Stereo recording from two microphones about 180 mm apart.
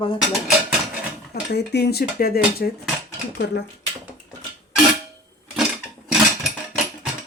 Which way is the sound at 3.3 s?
70° left (ahead or behind).